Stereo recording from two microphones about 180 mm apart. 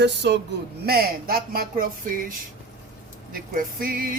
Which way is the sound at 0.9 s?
55° right (ahead or behind).